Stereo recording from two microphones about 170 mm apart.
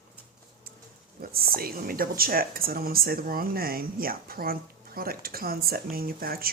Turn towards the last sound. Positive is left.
turn(degrees=-60)  # may be behind; listen again after turning